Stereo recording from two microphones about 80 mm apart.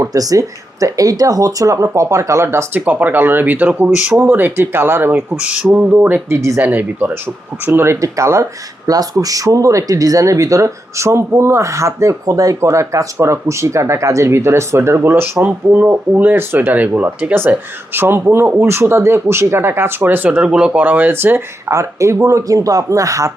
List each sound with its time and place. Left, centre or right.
0.0 s speech: right
2.8 s speech: right
5.4 s speech: centre; by 7.9 s right
8.0 s speech: right
8.9 s speech: right